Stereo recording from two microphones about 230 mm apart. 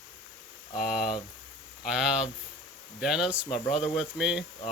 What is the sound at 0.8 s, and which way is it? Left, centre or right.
Speech, centre.